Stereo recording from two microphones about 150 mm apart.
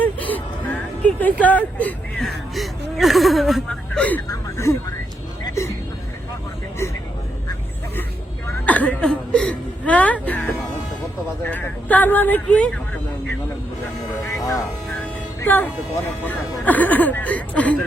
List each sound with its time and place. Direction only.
0.0 s gasp: 10° left (ahead or behind)
1.0 s speech: 10° left (ahead or behind)
4.3 s speech: 20° left (ahead or behind)
8.4 s a sound: 10° left (ahead or behind)
11.4 s speech: 10° left (ahead or behind)
14.3 s a sound: 20° left (ahead or behind)
15.4 s speech: 10° left (ahead or behind)